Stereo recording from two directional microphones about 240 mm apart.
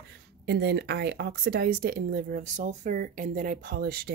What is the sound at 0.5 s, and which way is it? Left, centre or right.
Speech, right.